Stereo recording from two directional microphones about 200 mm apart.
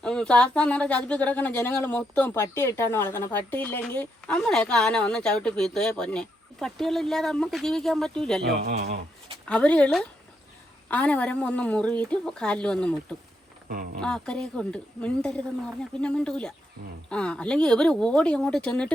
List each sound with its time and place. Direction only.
0.0 s a woman's voice: 5° left (ahead or behind)
8.4 s speech: 55° right (ahead or behind)
9.5 s a woman's voice: 5° left (ahead or behind)
13.7 s speech: 45° right (ahead or behind)
14.0 s a woman's voice: 5° left (ahead or behind)